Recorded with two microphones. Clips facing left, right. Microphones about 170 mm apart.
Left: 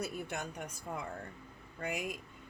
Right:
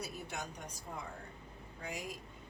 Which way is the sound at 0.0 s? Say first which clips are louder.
Left 4 dB; 55° left (ahead or behind).